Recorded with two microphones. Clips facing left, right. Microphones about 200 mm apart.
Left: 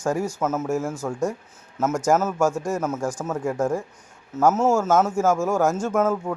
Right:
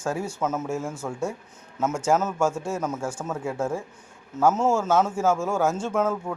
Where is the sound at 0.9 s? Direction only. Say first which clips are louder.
Left 4 dB; 10° right (ahead or behind).